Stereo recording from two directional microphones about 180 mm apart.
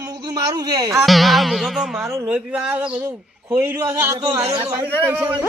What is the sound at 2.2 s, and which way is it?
A man's voice, 5° right (ahead or behind).